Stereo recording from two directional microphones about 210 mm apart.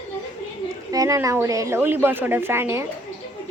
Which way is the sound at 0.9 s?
15° right (ahead or behind).